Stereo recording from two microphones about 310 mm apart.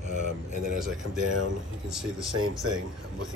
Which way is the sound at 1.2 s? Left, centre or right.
Right.